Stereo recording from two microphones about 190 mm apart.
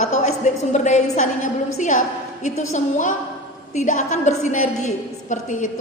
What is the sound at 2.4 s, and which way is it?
A woman's voice, 40° left (ahead or behind).